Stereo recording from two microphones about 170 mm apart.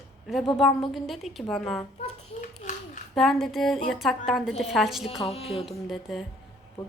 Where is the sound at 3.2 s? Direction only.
Centre (ahead or behind).